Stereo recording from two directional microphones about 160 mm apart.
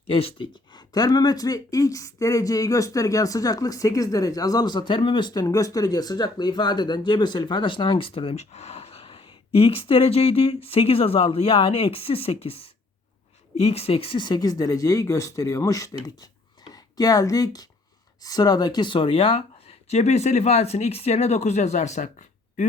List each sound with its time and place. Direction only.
0.1 s speech: 35° left (ahead or behind)
0.9 s speech: 25° left (ahead or behind); by 22.1 s 50° left (ahead or behind)